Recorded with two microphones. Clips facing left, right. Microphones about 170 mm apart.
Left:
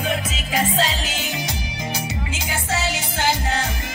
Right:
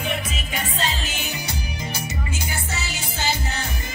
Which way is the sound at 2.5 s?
90° left.